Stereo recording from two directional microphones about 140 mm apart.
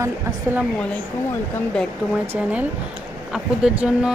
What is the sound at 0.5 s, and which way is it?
Speech, 15° right (ahead or behind).